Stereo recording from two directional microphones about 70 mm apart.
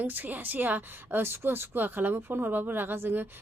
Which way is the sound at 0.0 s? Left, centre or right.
Right.